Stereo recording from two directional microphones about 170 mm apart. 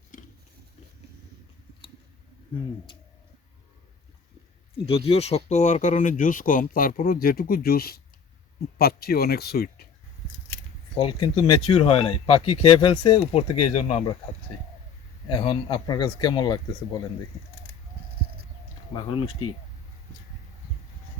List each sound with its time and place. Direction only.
4.9 s speech: 35° left (ahead or behind); by 9.8 s 65° left (ahead or behind)
11.2 s speech: 30° left (ahead or behind)
15.3 s speech: 30° left (ahead or behind)
18.9 s speech: 30° left (ahead or behind)